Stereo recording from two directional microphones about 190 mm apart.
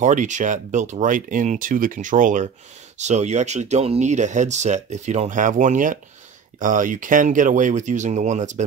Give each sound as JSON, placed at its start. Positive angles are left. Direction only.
{"t": 0.0, "sound": "speech", "side_deg": -40}